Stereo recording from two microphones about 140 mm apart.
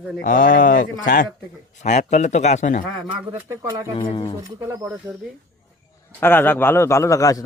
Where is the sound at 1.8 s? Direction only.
55° left (ahead or behind).